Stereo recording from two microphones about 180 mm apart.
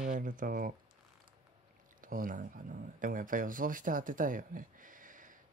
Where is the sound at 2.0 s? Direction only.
50° right (ahead or behind).